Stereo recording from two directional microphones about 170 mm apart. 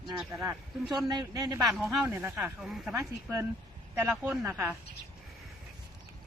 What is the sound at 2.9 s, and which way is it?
Speech, 15° right (ahead or behind).